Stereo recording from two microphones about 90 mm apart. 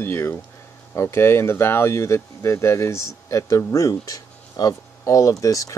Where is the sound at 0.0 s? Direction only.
25° left (ahead or behind).